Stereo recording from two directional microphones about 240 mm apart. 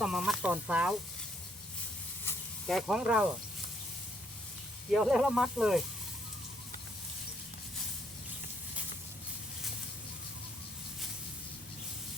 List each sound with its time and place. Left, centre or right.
0.0 s speech: centre
2.2 s snake: centre
4.9 s speech: centre